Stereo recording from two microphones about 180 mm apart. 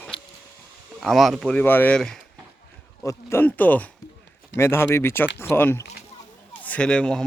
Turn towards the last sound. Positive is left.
turn(degrees=5)  # may be behind; listen again after turning